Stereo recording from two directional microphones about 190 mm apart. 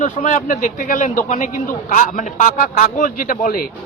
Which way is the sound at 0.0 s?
40° left (ahead or behind).